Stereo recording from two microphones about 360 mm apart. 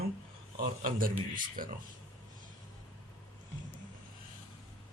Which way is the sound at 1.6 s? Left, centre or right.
Right.